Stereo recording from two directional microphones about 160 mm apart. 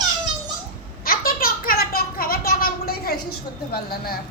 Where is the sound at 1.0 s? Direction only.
65° left (ahead or behind).